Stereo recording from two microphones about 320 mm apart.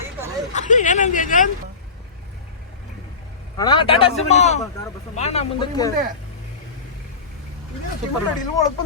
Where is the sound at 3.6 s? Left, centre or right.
Centre.